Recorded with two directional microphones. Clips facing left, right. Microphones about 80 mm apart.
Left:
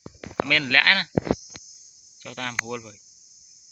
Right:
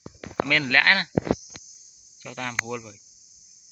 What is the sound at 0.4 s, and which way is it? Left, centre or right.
Speech, centre.